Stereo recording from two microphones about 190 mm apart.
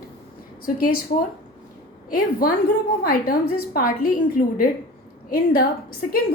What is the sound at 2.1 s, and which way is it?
A woman's voice, 50° left (ahead or behind).